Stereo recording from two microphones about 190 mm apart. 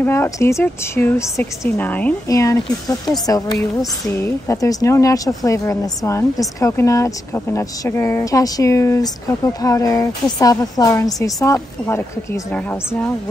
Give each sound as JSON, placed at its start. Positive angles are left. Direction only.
{"t": 0.0, "sound": "a woman's voice", "side_deg": 15}